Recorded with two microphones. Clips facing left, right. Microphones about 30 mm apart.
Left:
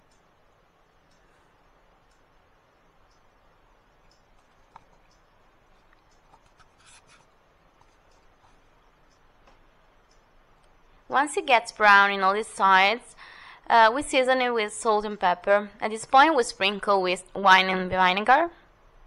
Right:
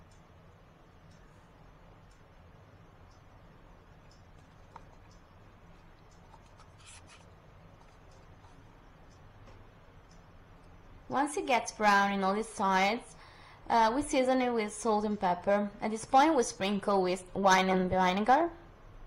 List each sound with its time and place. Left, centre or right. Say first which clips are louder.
11.1 s a woman's voice: left 8 dB; left
17.4 s a woman's voice: left 7 dB; left